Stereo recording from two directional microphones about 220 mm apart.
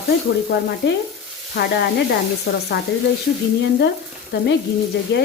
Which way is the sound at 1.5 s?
45° left (ahead or behind).